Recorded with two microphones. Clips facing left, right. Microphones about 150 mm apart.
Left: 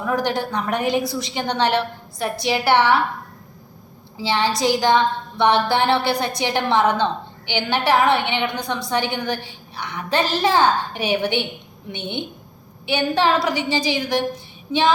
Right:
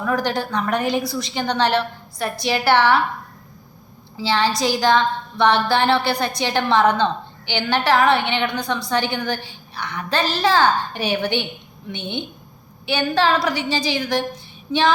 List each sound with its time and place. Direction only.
0.0 s a woman's voice: 20° left (ahead or behind)
4.2 s a woman's voice: 20° left (ahead or behind)